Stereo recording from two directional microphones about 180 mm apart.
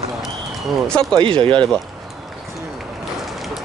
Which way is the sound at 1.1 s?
30° right (ahead or behind).